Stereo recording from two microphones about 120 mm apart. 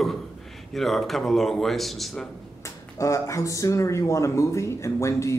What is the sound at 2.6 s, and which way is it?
Speech, 25° left (ahead or behind).